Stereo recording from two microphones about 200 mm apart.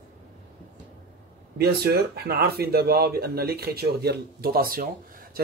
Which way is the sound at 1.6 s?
50° right (ahead or behind).